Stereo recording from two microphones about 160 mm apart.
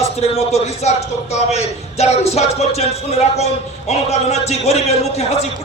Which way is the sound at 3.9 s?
40° left (ahead or behind).